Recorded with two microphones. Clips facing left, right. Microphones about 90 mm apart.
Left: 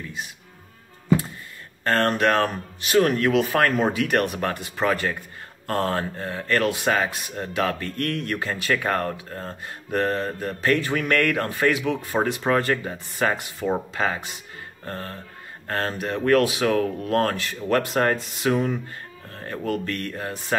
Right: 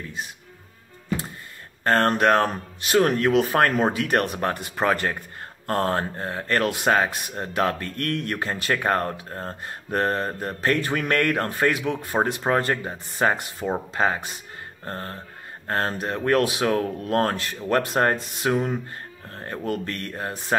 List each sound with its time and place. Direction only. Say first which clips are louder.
1.9 s speech: right 2 dB; 30° right (ahead or behind)
13.6 s speech: left 2 dB; 15° right (ahead or behind)
13.9 s speech: right 2 dB; 30° right (ahead or behind)